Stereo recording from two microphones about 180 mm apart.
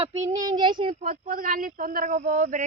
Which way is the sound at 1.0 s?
50° right (ahead or behind).